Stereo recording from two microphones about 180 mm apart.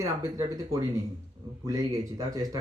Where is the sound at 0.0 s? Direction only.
20° right (ahead or behind).